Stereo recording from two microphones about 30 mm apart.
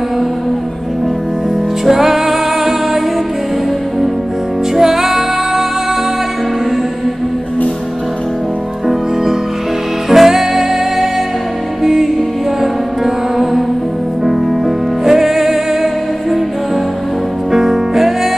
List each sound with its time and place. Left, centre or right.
1.9 s music: centre
4.7 s music: centre
10.0 s music: centre
15.0 s music: centre
17.5 s music: centre